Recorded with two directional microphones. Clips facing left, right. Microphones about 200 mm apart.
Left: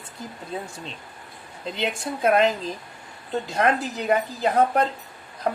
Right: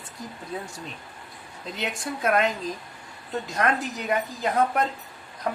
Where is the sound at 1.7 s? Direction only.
30° left (ahead or behind).